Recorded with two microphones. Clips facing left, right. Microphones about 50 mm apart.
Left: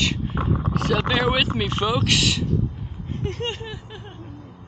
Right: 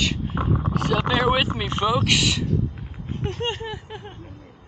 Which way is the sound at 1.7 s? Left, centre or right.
Centre.